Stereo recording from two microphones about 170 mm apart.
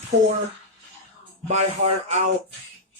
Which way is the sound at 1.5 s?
40° right (ahead or behind).